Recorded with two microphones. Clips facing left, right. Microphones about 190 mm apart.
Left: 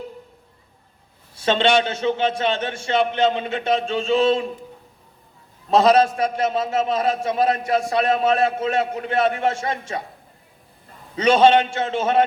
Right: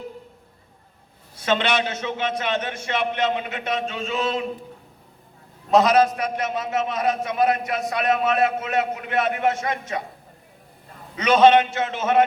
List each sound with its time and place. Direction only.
1.4 s a man's voice: 30° left (ahead or behind)
5.7 s a man's voice: 30° left (ahead or behind)
11.2 s a man's voice: 30° left (ahead or behind)